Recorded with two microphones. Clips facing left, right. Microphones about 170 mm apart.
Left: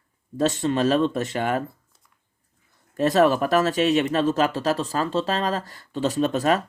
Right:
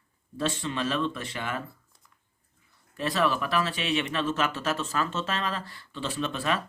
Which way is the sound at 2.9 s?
45° left (ahead or behind).